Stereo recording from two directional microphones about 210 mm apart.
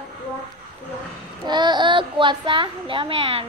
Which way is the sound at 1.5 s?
20° right (ahead or behind).